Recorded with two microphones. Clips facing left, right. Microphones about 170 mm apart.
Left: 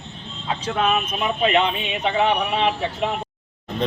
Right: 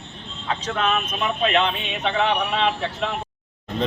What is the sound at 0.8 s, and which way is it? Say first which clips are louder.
Speech: left 3 dB; 15° left (ahead or behind).